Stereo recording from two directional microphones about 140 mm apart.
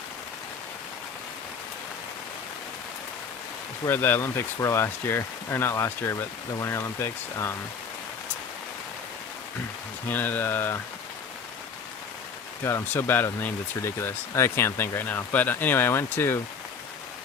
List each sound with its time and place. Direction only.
3.8 s speech: 15° left (ahead or behind)
10.1 s speech: 15° left (ahead or behind)
12.6 s speech: 15° left (ahead or behind)